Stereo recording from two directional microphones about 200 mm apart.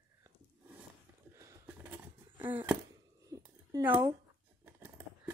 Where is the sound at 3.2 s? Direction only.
15° right (ahead or behind).